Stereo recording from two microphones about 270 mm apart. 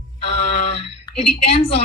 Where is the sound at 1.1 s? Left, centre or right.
Left.